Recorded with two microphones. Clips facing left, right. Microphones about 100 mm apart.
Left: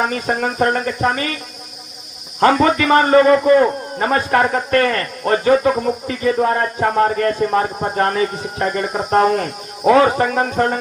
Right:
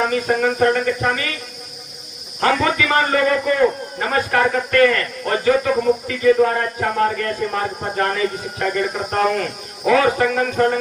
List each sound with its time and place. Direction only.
0.0 s a man's voice: 35° left (ahead or behind)
2.4 s a man's voice: 35° left (ahead or behind)